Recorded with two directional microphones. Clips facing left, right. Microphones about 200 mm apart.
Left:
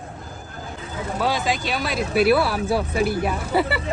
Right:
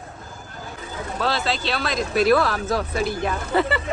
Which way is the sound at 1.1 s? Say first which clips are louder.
Left 1 dB; 15° left (ahead or behind).